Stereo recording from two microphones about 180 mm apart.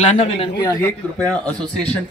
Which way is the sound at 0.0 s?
40° left (ahead or behind).